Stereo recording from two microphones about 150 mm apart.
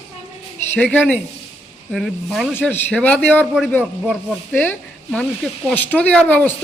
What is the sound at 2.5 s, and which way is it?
Speech, 10° left (ahead or behind).